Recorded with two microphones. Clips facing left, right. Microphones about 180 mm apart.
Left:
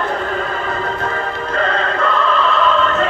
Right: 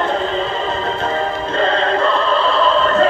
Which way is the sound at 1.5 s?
30° right (ahead or behind).